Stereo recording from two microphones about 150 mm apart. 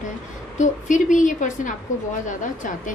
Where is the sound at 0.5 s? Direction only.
55° left (ahead or behind).